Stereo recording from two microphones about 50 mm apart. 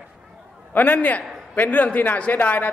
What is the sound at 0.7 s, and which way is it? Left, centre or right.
A man's voice, left.